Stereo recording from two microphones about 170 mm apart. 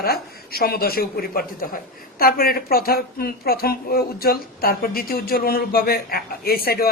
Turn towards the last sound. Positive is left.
turn(degrees=65)  # may be behind; listen again after turning